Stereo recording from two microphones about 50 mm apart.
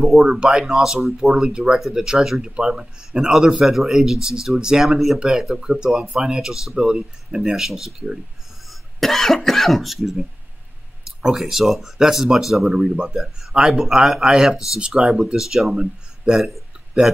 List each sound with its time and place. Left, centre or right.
0.0 s speech: centre
0.3 s speech: centre
8.6 s speech: centre
11.2 s speech: centre
13.2 s speech: centre